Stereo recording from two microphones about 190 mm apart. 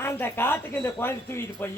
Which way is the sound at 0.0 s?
15° left (ahead or behind).